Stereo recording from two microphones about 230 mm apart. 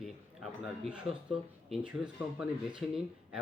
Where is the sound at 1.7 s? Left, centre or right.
Centre.